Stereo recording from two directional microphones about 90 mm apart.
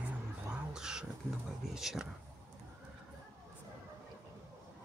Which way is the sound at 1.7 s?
5° right (ahead or behind).